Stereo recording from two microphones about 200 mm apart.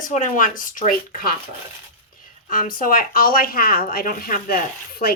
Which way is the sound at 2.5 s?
45° left (ahead or behind).